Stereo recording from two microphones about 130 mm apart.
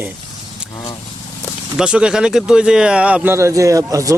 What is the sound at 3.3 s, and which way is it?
Speech, 25° right (ahead or behind).